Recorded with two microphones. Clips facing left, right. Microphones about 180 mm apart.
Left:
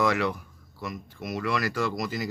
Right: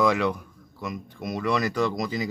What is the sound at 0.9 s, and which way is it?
Speech, 20° right (ahead or behind).